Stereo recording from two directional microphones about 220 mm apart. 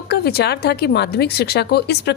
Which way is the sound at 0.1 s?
45° left (ahead or behind).